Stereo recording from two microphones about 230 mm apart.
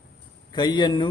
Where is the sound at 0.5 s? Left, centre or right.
Centre.